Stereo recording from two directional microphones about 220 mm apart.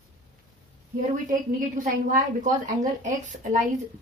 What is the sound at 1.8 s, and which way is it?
Speech, 35° right (ahead or behind).